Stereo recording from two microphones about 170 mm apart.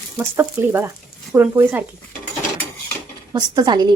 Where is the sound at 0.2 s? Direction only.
15° right (ahead or behind).